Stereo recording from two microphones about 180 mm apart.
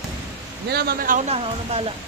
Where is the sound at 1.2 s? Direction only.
35° right (ahead or behind).